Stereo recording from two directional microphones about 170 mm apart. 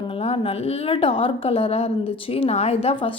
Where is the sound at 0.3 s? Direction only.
35° left (ahead or behind).